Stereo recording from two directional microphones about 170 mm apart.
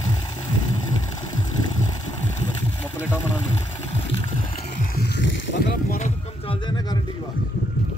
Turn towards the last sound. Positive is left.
turn(degrees=30)  # may be behind; listen again after turning